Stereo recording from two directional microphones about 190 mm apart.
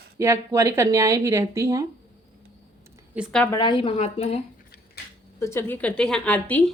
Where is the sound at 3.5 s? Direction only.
25° left (ahead or behind).